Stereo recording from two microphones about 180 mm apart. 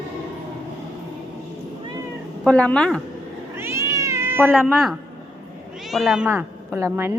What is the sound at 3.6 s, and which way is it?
Cat, 15° right (ahead or behind).